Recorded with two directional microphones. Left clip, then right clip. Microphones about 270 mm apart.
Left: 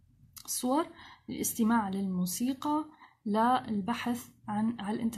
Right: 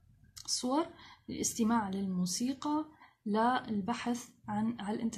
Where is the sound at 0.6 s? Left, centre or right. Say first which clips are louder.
Left 4 dB; centre.